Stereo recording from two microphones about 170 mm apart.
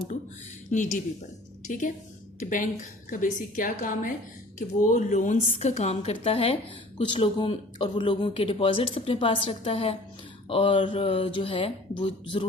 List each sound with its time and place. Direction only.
0.7 s a woman's voice: 50° left (ahead or behind)
3.1 s a woman's voice: 50° left (ahead or behind); by 12.5 s 30° left (ahead or behind)